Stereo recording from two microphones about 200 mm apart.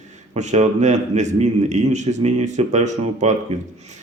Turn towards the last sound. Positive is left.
turn(degrees=-35)  # may be behind; listen again after turning